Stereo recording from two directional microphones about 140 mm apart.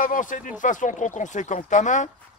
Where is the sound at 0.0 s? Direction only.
70° left (ahead or behind).